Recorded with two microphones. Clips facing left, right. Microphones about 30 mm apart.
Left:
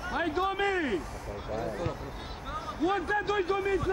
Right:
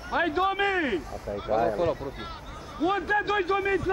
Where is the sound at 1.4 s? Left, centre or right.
Right.